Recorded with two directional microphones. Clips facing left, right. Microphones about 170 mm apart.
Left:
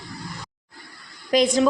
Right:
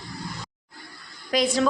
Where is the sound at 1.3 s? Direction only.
20° left (ahead or behind).